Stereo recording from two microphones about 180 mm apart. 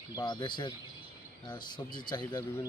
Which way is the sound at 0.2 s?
25° left (ahead or behind).